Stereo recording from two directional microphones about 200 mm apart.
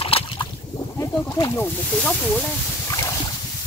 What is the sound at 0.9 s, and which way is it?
Speech, 15° left (ahead or behind).